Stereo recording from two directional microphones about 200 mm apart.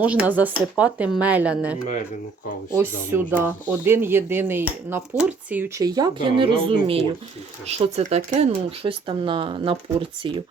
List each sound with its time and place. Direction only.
0.0 s speech: 5° right (ahead or behind); by 10.4 s 25° right (ahead or behind)